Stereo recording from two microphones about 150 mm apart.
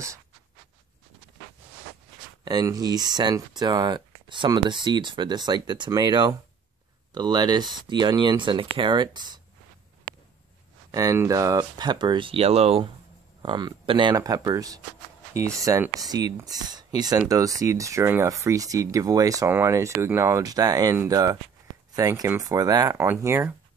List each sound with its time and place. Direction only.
2.4 s speech: 25° right (ahead or behind)
10.9 s speech: 20° right (ahead or behind); by 12.9 s 40° right (ahead or behind)
13.4 s speech: 30° right (ahead or behind)